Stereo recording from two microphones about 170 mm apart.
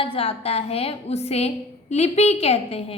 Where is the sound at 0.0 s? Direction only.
35° left (ahead or behind).